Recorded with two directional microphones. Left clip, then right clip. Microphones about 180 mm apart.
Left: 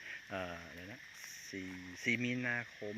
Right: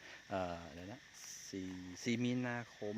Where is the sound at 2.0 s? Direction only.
20° right (ahead or behind).